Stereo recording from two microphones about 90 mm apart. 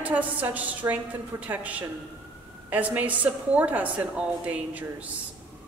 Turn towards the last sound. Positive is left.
turn(degrees=-15)  # may be behind; listen again after turning